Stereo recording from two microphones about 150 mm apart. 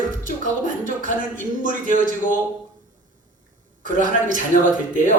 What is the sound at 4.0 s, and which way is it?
Speech, 60° right (ahead or behind).